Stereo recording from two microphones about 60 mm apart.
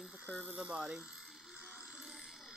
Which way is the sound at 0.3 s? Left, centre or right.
Right.